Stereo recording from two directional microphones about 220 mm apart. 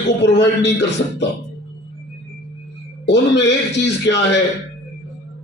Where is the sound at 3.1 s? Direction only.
55° left (ahead or behind).